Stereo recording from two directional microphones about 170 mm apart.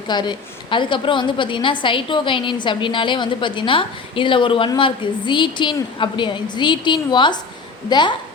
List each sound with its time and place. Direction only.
0.1 s a woman's voice: 25° left (ahead or behind)